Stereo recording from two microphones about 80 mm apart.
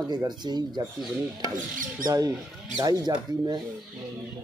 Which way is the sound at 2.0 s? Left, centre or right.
Right.